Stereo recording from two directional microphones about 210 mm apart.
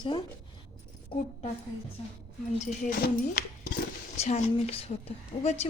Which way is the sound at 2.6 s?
40° left (ahead or behind).